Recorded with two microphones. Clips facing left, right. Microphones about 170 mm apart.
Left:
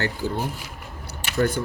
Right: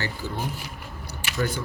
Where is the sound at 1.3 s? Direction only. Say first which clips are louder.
Left 5 dB; 55° left (ahead or behind).